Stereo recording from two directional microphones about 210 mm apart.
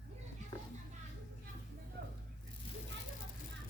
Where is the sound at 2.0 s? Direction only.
50° right (ahead or behind).